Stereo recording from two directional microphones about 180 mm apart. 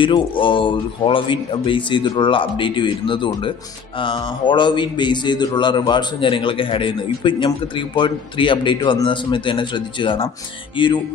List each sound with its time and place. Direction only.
0.0 s a man's voice: 25° left (ahead or behind)